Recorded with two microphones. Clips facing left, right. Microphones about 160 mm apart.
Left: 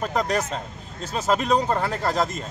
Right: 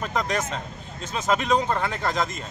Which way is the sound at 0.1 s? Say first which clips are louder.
Left 2 dB; 35° left (ahead or behind).